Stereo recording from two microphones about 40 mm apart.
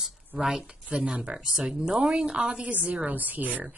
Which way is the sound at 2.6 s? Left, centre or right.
Right.